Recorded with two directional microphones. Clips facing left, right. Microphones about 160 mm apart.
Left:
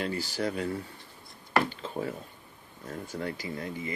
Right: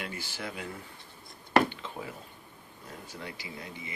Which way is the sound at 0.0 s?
40° left (ahead or behind).